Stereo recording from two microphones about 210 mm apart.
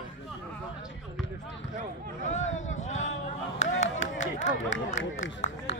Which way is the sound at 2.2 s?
35° left (ahead or behind).